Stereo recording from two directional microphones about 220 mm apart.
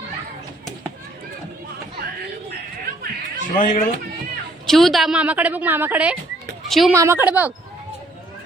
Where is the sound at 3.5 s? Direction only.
35° left (ahead or behind).